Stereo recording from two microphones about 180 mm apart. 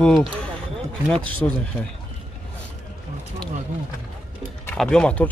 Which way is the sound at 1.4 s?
15° left (ahead or behind).